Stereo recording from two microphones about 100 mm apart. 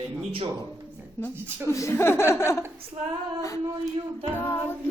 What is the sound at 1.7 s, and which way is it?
Music, 30° left (ahead or behind).